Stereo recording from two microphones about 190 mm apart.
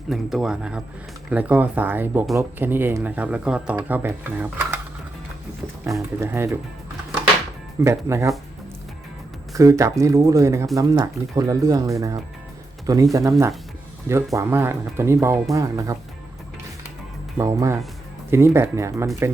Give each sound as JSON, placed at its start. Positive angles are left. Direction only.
{"t": 0.1, "sound": "a man's voice", "side_deg": 0}
{"t": 5.8, "sound": "speech", "side_deg": -15}
{"t": 7.9, "sound": "speech", "side_deg": -15}
{"t": 9.6, "sound": "speech", "side_deg": -15}
{"t": 17.3, "sound": "speech", "side_deg": -15}